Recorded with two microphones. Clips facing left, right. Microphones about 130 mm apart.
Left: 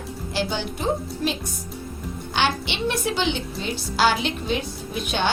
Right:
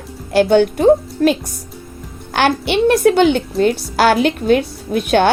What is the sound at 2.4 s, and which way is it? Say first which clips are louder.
A woman's voice: right 10 dB; 55° right (ahead or behind).